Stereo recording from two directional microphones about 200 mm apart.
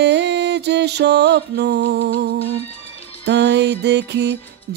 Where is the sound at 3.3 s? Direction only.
60° right (ahead or behind).